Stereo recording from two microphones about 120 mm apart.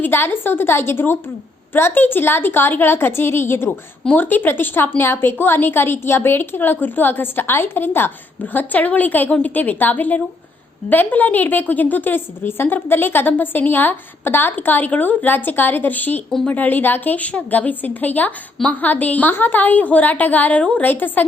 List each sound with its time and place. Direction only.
0.0 s a woman's voice: 20° left (ahead or behind)
16.3 s speech: 5° left (ahead or behind)
16.6 s a woman's voice: 15° left (ahead or behind)